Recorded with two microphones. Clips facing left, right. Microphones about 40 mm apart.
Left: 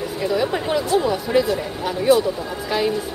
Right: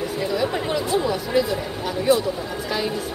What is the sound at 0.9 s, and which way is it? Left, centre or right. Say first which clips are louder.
Speech: left 3 dB; centre.